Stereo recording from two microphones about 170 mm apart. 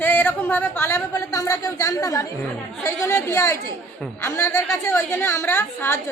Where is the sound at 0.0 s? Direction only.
10° left (ahead or behind).